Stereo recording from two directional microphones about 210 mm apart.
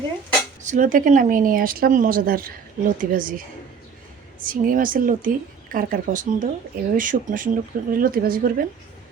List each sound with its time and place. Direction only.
0.6 s speech: 35° right (ahead or behind)
4.4 s speech: 40° right (ahead or behind)